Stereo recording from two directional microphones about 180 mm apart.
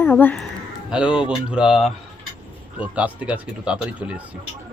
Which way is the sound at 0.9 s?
5° right (ahead or behind).